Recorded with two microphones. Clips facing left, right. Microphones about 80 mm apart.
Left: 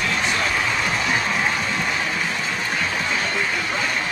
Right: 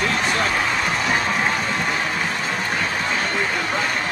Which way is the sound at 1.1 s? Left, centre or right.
Right.